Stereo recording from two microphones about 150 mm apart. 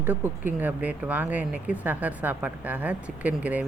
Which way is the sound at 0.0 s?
10° right (ahead or behind).